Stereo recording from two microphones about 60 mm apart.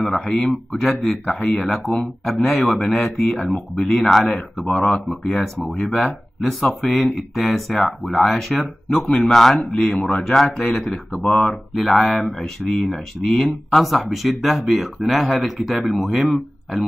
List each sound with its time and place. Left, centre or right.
0.2 s speech: centre
11.1 s speech: centre
11.7 s speech: centre